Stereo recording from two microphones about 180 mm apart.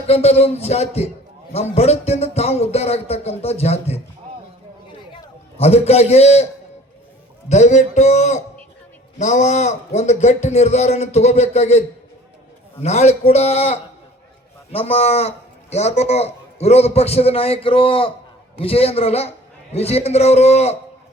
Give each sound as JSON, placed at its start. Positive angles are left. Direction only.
{"t": 0.1, "sound": "a man's voice", "side_deg": 35}
{"t": 5.5, "sound": "a man's voice", "side_deg": 35}